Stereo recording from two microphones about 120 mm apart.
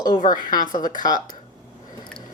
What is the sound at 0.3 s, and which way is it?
Speech, 35° left (ahead or behind).